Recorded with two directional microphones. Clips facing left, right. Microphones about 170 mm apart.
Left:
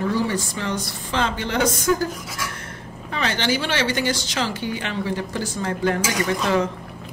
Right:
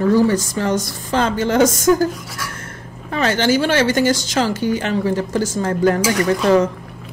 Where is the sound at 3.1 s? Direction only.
45° right (ahead or behind).